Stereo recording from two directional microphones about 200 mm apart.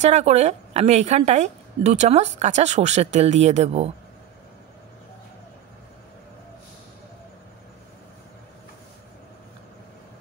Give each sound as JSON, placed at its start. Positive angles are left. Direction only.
{"t": 0.0, "sound": "a woman's voice", "side_deg": -35}